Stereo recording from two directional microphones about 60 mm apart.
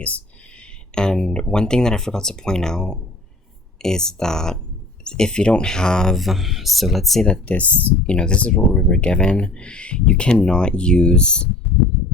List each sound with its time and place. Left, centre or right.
0.9 s speech: centre
7.3 s speech: left